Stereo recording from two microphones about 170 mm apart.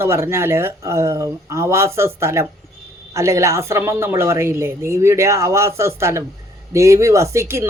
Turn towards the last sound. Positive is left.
turn(degrees=-15)  # may be behind; listen again after turning